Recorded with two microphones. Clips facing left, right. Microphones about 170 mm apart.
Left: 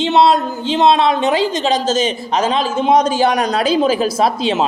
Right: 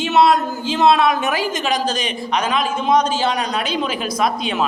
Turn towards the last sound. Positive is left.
turn(degrees=25)  # may be behind; listen again after turning